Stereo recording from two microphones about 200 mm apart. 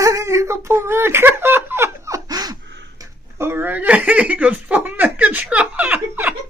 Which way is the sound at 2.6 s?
60° right (ahead or behind).